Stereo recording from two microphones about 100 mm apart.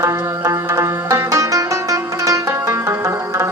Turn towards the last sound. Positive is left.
turn(degrees=-25)  # may be behind; listen again after turning